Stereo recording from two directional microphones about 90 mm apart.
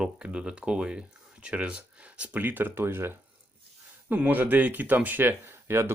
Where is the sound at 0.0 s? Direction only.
10° right (ahead or behind).